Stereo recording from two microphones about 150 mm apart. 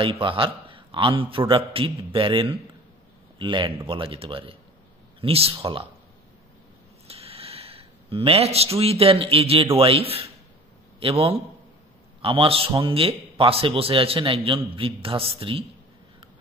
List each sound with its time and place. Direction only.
0.0 s a man's voice: 35° right (ahead or behind)
7.1 s a man's voice: 40° right (ahead or behind)